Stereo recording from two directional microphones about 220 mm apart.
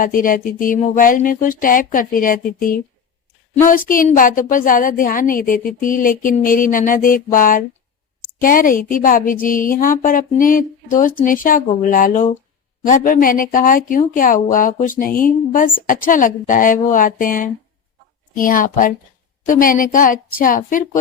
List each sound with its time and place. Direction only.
0.0 s a woman's voice: 40° left (ahead or behind)